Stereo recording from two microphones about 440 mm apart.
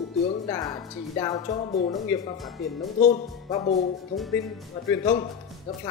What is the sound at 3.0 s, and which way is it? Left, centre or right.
Speech, centre.